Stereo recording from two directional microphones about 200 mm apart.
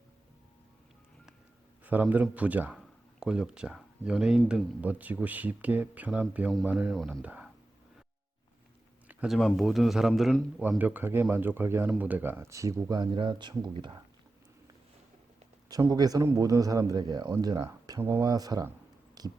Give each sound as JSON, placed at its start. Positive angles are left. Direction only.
{"t": 1.8, "sound": "speech", "side_deg": -10}
{"t": 9.0, "sound": "a man's voice", "side_deg": 0}
{"t": 15.7, "sound": "a man's voice", "side_deg": -20}
{"t": 19.2, "sound": "heart sounds", "side_deg": -20}